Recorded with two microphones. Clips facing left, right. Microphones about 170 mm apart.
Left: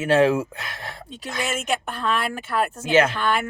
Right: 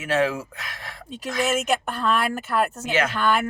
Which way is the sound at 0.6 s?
30° left (ahead or behind).